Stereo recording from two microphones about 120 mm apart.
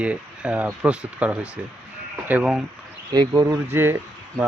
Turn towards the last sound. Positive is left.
turn(degrees=-20)  # may be behind; listen again after turning